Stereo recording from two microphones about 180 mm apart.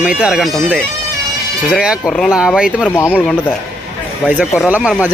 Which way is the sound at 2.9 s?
15° left (ahead or behind).